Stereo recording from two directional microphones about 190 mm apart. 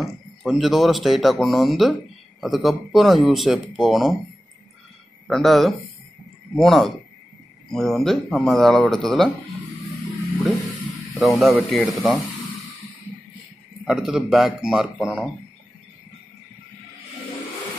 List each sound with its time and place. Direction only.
0.0 s speech: centre (ahead or behind)
5.3 s speech: centre (ahead or behind)
11.3 s speech: centre (ahead or behind)
13.8 s speech: 5° right (ahead or behind)